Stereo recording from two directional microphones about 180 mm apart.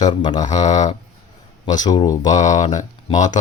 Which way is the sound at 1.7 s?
25° left (ahead or behind).